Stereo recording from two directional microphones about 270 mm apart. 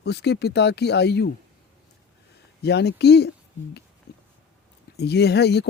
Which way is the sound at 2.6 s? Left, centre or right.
Left.